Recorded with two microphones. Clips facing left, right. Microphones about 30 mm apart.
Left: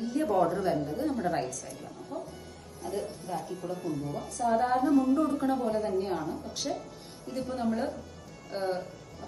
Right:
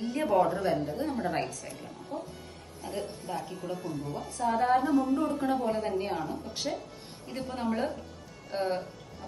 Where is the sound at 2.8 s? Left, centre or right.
Right.